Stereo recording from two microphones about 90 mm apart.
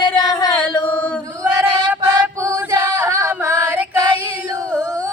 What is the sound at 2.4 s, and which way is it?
Singing, 35° right (ahead or behind).